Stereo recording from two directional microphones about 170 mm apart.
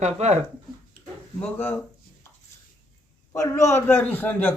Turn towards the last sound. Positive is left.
turn(degrees=10)  # may be behind; listen again after turning